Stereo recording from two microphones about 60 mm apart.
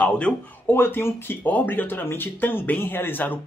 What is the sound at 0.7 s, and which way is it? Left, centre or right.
Speech, left.